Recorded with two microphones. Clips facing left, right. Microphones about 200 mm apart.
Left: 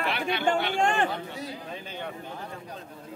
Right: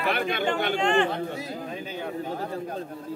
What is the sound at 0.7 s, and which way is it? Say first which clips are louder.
Speech: right 3 dB; 45° left (ahead or behind).